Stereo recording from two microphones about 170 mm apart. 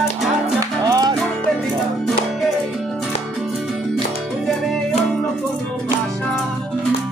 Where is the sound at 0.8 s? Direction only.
25° right (ahead or behind).